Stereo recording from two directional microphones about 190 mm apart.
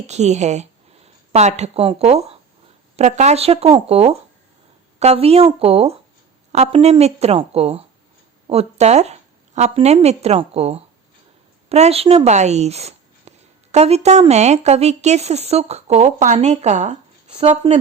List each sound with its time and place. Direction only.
0.1 s a woman's voice: 35° right (ahead or behind)